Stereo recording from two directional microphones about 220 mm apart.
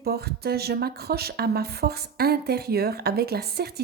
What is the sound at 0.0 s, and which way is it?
Speech, 45° right (ahead or behind).